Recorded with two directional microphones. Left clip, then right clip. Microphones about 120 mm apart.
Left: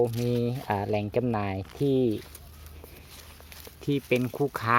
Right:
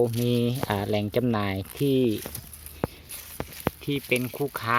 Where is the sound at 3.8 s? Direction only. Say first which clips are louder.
Left 2 dB; 15° left (ahead or behind).